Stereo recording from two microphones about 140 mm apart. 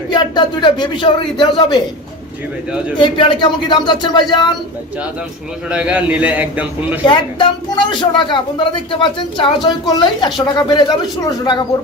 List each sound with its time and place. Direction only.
0.1 s speech: 35° left (ahead or behind)
3.0 s speech: 35° left (ahead or behind)
5.6 s a man's voice: 5° right (ahead or behind)
7.0 s speech: 35° left (ahead or behind)